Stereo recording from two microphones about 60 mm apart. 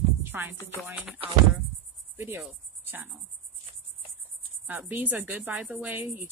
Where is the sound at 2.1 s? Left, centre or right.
Right.